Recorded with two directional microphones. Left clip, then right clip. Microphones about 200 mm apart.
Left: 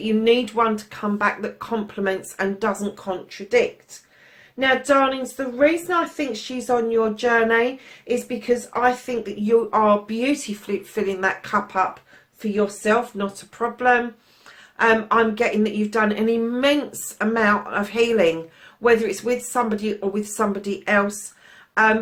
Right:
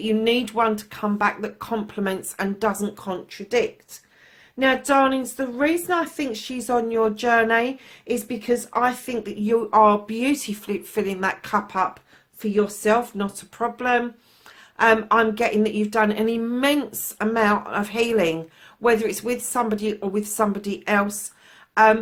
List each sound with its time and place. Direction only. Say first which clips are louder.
0.0 s a woman's voice: left 3 dB; 50° right (ahead or behind)
4.6 s a woman's voice: left 1 dB; 50° right (ahead or behind)